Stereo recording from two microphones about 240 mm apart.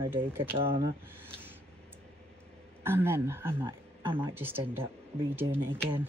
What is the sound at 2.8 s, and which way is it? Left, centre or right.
Speech, centre.